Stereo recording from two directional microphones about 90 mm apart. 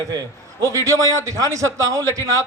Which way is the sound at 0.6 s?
35° right (ahead or behind).